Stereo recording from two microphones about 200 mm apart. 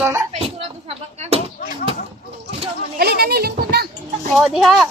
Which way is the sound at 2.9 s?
50° right (ahead or behind).